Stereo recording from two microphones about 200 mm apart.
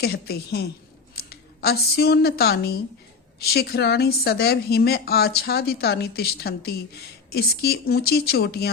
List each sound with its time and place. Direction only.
0.0 s a woman's voice: 50° left (ahead or behind)